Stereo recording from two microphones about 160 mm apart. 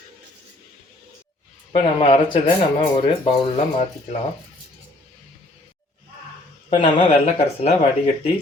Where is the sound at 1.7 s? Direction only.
35° left (ahead or behind).